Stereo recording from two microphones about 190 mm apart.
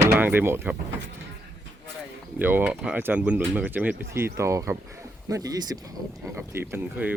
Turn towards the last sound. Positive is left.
turn(degrees=-10)  # may be behind; listen again after turning